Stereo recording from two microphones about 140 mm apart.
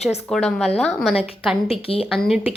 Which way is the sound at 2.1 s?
Centre (ahead or behind).